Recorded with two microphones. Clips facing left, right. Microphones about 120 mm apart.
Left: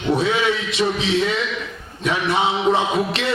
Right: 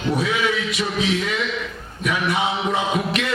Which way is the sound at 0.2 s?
30° left (ahead or behind).